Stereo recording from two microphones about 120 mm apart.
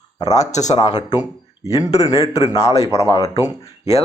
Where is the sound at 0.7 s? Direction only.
35° left (ahead or behind).